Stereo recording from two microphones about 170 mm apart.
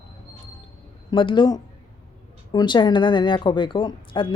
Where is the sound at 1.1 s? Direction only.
30° left (ahead or behind).